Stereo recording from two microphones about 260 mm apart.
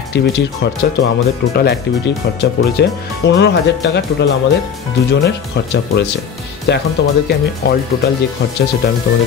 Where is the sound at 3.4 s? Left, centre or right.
Left.